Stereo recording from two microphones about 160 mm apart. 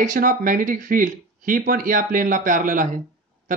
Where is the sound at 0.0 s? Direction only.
55° right (ahead or behind).